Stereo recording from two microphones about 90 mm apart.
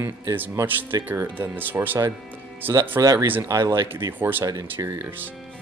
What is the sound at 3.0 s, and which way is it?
Speech, 45° right (ahead or behind).